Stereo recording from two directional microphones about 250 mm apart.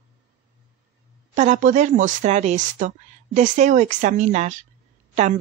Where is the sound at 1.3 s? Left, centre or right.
Right.